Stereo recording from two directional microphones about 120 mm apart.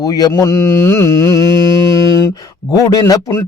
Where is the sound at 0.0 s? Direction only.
35° left (ahead or behind).